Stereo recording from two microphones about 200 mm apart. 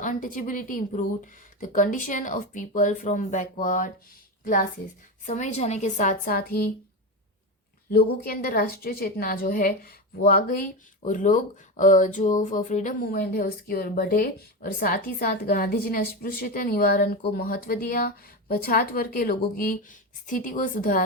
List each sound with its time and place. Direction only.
0.0 s a woman's voice: 40° left (ahead or behind)
5.2 s a woman's voice: 35° left (ahead or behind)
7.9 s speech: 50° left (ahead or behind)